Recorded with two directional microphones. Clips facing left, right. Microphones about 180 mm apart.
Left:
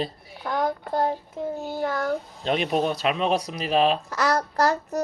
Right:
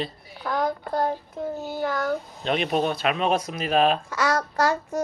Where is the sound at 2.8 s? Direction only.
35° left (ahead or behind).